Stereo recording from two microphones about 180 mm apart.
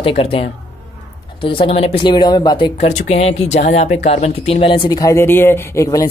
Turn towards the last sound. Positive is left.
turn(degrees=15)  # may be behind; listen again after turning